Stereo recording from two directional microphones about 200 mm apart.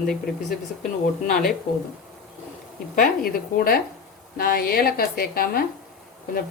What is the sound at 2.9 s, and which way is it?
Speech, 45° left (ahead or behind).